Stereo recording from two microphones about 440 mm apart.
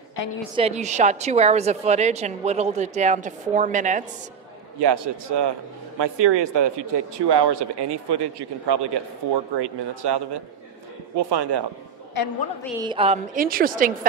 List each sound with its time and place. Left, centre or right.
0.6 s a woman's voice: centre
4.7 s speech: right
12.7 s a woman's voice: centre